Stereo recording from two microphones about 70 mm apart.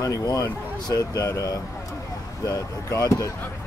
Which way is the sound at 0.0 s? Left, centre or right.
Left.